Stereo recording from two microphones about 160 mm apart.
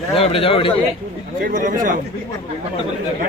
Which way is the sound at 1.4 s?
55° right (ahead or behind).